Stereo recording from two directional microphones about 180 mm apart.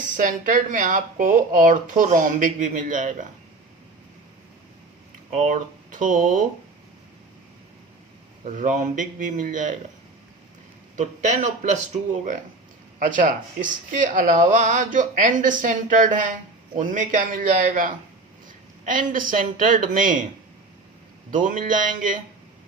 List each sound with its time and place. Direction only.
0.2 s speech: 45° right (ahead or behind)
5.3 s speech: 45° right (ahead or behind)
8.4 s speech: 45° right (ahead or behind)
10.9 s speech: 40° right (ahead or behind)
13.0 s speech: 50° right (ahead or behind)
18.4 s a sound: 50° right (ahead or behind)
19.4 s speech: 50° right (ahead or behind)
21.2 s speech: 45° right (ahead or behind)